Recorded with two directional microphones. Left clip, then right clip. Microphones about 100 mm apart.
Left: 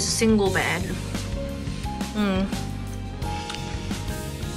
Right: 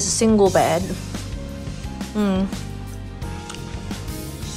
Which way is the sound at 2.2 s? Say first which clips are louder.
Right 3 dB; 25° right (ahead or behind).